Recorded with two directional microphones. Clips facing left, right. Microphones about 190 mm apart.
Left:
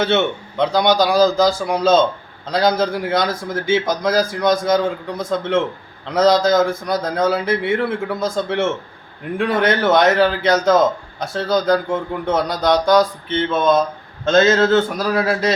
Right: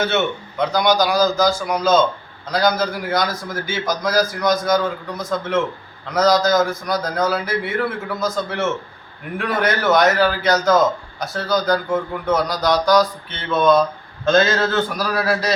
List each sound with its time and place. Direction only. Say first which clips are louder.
0.0 s a man's voice: left 3 dB; 30° left (ahead or behind)